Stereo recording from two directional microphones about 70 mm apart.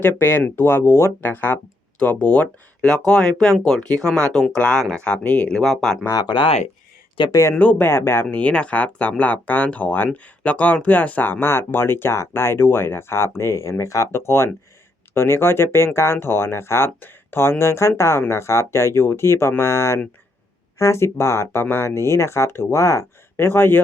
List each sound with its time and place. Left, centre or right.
0.0 s speech: left
1.2 s speech: left; by 6.0 s centre
6.1 s speech: left
7.3 s speech: left
7.5 s speech: left
7.9 s speech: left
8.3 s speech: centre; by 23.5 s left
23.5 s speech: left